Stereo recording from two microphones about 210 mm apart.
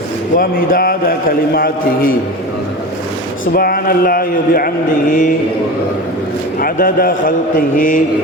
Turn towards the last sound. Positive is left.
turn(degrees=40)  # may be behind; listen again after turning